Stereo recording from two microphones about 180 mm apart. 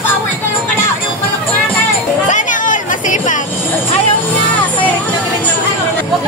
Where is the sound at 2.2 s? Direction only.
45° left (ahead or behind).